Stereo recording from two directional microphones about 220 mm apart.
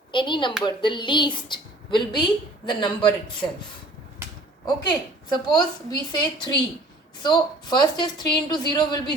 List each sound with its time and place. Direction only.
0.1 s a woman's voice: 20° left (ahead or behind)
4.6 s a woman's voice: 20° left (ahead or behind)